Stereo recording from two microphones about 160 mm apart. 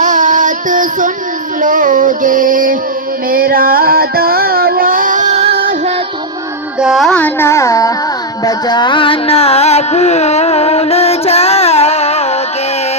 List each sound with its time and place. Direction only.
0.0 s a sound: 50° right (ahead or behind)
1.6 s female singing: 55° right (ahead or behind)
3.2 s music: 65° right (ahead or behind); by 5.6 s 40° right (ahead or behind)
6.7 s carnatic music: centre (ahead or behind); by 7.9 s 20° left (ahead or behind)
8.4 s music: 25° left (ahead or behind)